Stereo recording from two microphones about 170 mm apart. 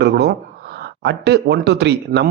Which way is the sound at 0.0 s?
75° right (ahead or behind).